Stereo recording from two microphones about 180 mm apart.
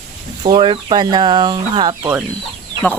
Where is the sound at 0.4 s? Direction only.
25° right (ahead or behind).